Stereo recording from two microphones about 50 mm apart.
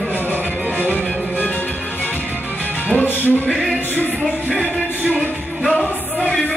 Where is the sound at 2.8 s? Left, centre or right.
Left.